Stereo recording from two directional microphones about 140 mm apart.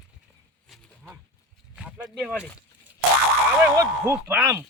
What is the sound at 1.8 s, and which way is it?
Speech, 10° right (ahead or behind).